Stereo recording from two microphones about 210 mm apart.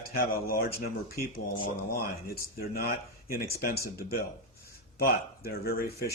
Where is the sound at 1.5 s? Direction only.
25° left (ahead or behind).